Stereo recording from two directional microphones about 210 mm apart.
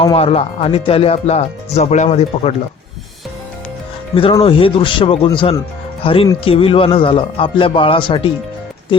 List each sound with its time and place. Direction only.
0.0 s speech: 25° left (ahead or behind)
4.1 s speech: 25° left (ahead or behind)